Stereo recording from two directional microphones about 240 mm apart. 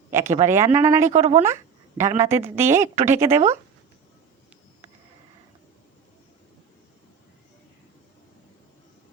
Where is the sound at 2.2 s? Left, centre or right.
Centre.